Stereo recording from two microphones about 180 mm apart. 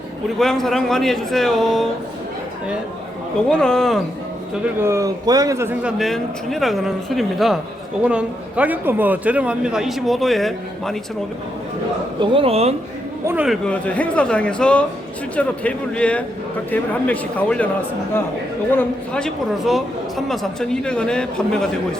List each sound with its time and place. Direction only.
0.3 s speech: centre (ahead or behind)
3.5 s speech: 5° left (ahead or behind)
4.8 s a man's voice: 15° right (ahead or behind)
6.0 s a man's voice: centre (ahead or behind)
12.2 s speech: 30° right (ahead or behind)
13.2 s a man's voice: 5° right (ahead or behind)
13.7 s speech: 10° left (ahead or behind)
18.7 s speech: 10° left (ahead or behind)